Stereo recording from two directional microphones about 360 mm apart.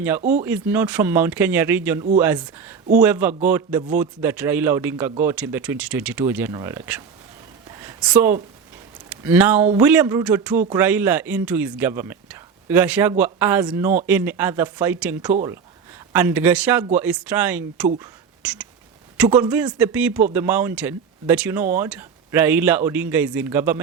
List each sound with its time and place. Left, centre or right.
0.2 s speech: centre
0.4 s speech: centre
7.8 s a sound: centre
9.0 s speech: centre